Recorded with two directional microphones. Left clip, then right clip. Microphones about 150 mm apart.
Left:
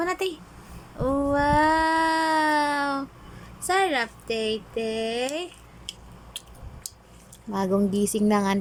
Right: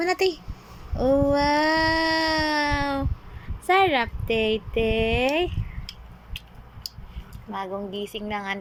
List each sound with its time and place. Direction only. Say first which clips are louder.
0.0 s speech: right 4 dB; 10° left (ahead or behind)
0.9 s a sound: right 3 dB; 5° left (ahead or behind)
3.7 s speech: right 3 dB; 5° left (ahead or behind)
7.9 s speech: left 7 dB; 40° left (ahead or behind)